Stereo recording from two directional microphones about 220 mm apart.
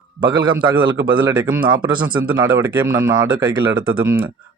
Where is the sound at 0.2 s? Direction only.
20° right (ahead or behind).